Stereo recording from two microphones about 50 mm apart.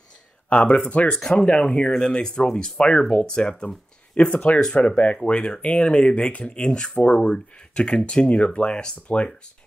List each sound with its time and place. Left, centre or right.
0.5 s speech: left